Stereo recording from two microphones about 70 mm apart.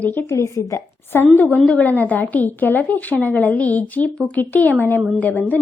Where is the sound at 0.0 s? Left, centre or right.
Left.